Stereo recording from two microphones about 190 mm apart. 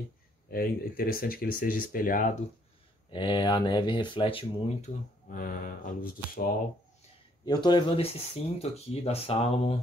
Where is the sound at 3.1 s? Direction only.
25° left (ahead or behind).